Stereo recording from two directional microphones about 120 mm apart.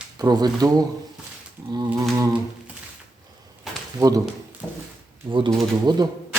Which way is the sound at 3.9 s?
30° right (ahead or behind).